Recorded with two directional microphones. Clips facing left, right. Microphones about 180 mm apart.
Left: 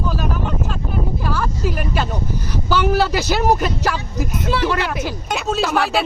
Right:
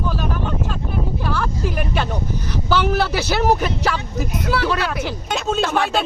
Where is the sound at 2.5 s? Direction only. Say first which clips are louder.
Left 1 dB; 10° left (ahead or behind).